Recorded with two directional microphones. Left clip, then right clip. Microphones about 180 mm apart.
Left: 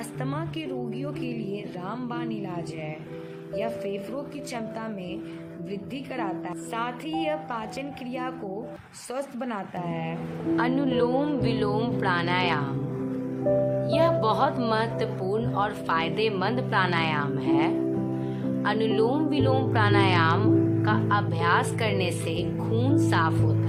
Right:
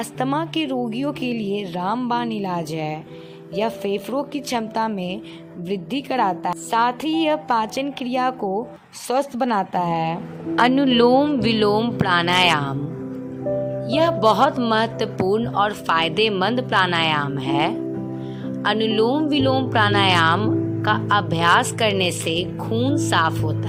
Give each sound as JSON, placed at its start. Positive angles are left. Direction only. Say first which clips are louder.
{"t": 0.2, "sound": "a woman's voice", "louder": "right 11 dB", "side_deg": -50}
{"t": 10.5, "sound": "a woman's voice", "louder": "right 8 dB", "side_deg": -40}
{"t": 11.1, "sound": "speech", "louder": "right 9 dB", "side_deg": -25}
{"t": 11.3, "sound": "a woman's voice", "louder": "right 7 dB", "side_deg": -40}
{"t": 13.4, "sound": "music", "louder": "even", "side_deg": 0}
{"t": 13.8, "sound": "a woman's voice", "louder": "right 9 dB", "side_deg": -30}
{"t": 17.7, "sound": "music", "louder": "even", "side_deg": 0}
{"t": 18.6, "sound": "a woman's voice", "louder": "right 5 dB", "side_deg": -35}
{"t": 20.6, "sound": "music", "louder": "even", "side_deg": 0}
{"t": 21.1, "sound": "a woman's voice", "louder": "right 8 dB", "side_deg": -35}
{"t": 22.7, "sound": "speech", "louder": "right 4 dB", "side_deg": -25}
{"t": 23.0, "sound": "a woman's voice", "louder": "right 9 dB", "side_deg": -35}